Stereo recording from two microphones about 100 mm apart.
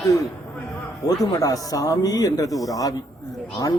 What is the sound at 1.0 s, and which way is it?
Speech, 35° left (ahead or behind).